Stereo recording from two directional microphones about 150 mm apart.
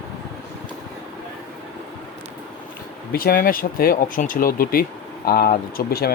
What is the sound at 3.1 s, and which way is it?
Speech, 85° left.